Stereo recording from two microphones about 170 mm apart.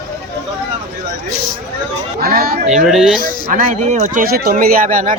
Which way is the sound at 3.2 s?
45° right (ahead or behind).